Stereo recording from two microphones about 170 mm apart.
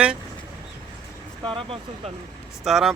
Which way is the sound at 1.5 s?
30° right (ahead or behind).